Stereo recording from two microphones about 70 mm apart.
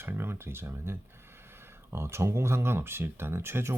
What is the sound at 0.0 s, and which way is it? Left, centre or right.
Speech, right.